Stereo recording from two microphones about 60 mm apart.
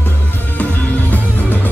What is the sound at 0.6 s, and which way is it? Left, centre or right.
Music, left.